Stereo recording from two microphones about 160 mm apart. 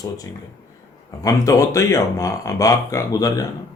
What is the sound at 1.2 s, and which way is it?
A man's voice, 20° left (ahead or behind).